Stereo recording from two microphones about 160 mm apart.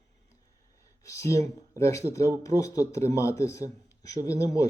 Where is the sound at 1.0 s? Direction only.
20° left (ahead or behind).